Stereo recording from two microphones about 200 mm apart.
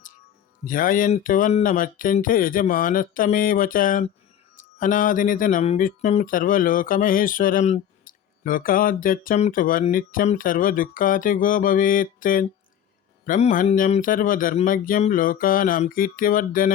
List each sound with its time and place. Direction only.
0.6 s speech: 45° left (ahead or behind)